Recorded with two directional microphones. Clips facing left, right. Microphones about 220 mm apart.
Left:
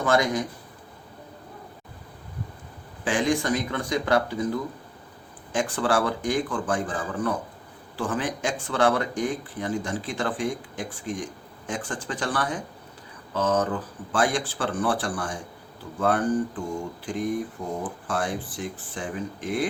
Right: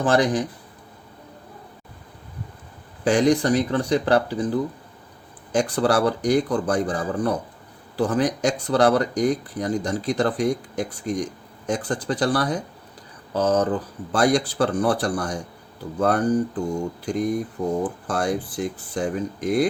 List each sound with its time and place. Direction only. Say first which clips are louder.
0.0 s speech: right 3 dB; 35° right (ahead or behind)
3.0 s speech: right 6 dB; 40° right (ahead or behind)
18.1 s speech: right 3 dB; 40° right (ahead or behind)